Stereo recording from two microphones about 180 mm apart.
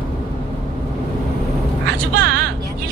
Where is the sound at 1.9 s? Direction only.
65° right (ahead or behind).